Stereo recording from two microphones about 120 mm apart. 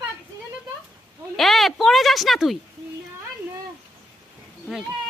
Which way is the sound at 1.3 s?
Centre (ahead or behind).